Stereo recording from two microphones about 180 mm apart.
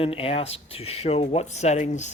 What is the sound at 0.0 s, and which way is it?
Speech, 30° left (ahead or behind).